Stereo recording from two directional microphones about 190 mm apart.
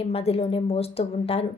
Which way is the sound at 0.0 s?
30° left (ahead or behind).